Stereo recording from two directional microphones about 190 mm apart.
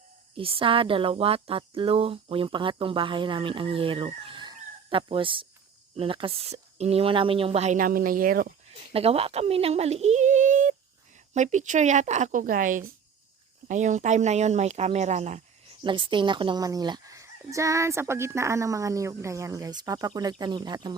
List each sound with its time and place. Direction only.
0.3 s speech: 30° right (ahead or behind); by 8.5 s 50° right (ahead or behind)
8.9 s speech: 30° right (ahead or behind)
15.8 s speech: 25° right (ahead or behind)